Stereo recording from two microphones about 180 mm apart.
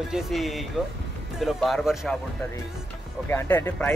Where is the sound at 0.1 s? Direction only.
Centre (ahead or behind).